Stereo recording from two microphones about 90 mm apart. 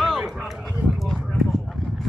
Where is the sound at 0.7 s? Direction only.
Centre (ahead or behind).